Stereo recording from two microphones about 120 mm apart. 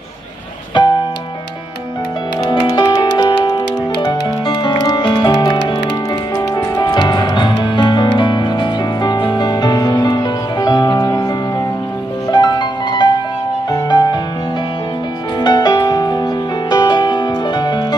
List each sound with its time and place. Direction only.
0.8 s music: 40° left (ahead or behind)
2.9 s music: 40° left (ahead or behind)
12.3 s music: 35° left (ahead or behind)
15.4 s music: 35° left (ahead or behind)